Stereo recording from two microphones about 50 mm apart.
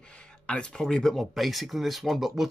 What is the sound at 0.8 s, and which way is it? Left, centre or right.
A man's voice, centre.